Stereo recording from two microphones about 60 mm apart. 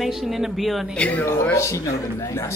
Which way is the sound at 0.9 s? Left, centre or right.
Left.